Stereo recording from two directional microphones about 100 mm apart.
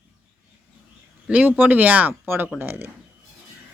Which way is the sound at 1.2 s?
15° right (ahead or behind).